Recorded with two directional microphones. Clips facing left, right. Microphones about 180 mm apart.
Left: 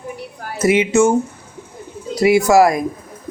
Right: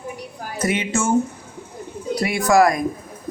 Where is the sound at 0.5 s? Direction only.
25° left (ahead or behind).